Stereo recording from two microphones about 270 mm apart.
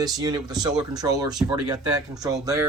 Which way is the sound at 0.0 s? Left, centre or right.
Centre.